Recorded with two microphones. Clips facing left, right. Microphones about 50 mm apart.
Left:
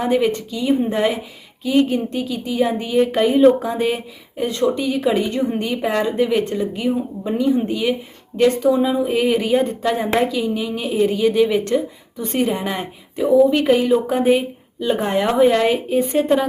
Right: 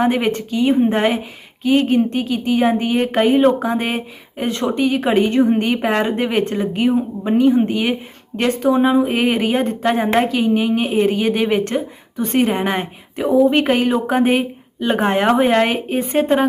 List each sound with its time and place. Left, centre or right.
0.0 s speech: right